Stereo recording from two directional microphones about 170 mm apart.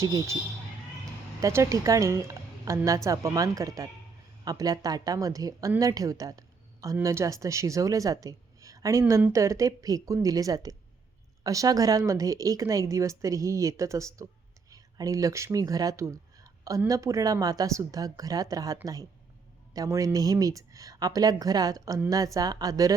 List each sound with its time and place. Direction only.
0.0 s speech: 20° right (ahead or behind)
1.4 s speech: 20° right (ahead or behind)